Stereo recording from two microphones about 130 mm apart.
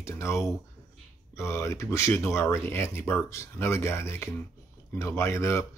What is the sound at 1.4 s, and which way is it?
Speech, 20° left (ahead or behind).